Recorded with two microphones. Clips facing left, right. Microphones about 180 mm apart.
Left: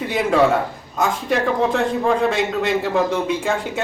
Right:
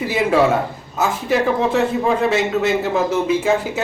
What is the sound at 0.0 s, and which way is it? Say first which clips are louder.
A man's voice: right 1 dB; 5° right (ahead or behind).